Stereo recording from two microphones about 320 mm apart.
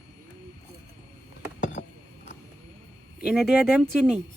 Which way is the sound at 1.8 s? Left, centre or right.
Left.